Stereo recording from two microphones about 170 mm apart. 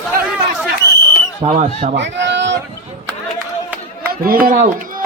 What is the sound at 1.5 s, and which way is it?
Speech, 45° right (ahead or behind).